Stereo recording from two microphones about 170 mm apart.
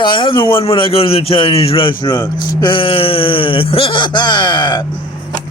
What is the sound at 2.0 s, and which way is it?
Speech, 25° left (ahead or behind).